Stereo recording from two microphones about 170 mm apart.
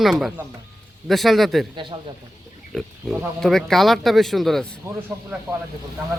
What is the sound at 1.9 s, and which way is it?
Speech, 30° right (ahead or behind).